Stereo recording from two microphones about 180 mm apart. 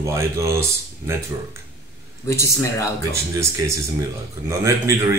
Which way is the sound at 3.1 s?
15° right (ahead or behind).